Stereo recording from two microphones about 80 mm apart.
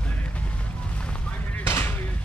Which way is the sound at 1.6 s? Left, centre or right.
Left.